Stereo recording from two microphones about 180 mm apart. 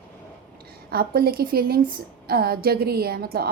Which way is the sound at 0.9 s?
55° right (ahead or behind).